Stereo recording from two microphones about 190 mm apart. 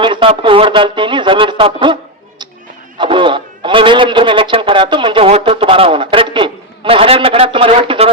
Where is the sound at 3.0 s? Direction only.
25° right (ahead or behind).